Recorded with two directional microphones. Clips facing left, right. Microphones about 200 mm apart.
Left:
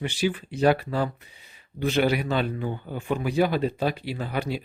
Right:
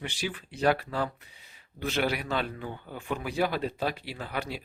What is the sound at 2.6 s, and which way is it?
Speech, 20° left (ahead or behind).